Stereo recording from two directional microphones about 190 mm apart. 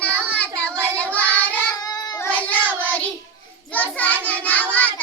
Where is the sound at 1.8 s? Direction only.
20° left (ahead or behind).